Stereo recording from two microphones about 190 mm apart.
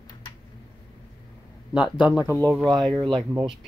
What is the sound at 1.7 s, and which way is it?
Speech, 5° right (ahead or behind).